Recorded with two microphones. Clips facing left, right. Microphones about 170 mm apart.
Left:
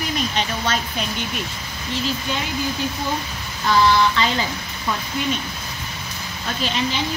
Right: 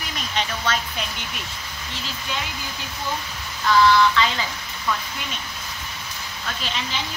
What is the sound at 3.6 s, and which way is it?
Speech, 30° left (ahead or behind).